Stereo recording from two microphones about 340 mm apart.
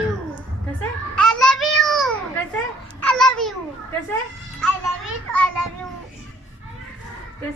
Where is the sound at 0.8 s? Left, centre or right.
Centre.